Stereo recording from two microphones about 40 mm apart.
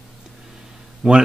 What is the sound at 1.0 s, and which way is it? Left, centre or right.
Speech, centre.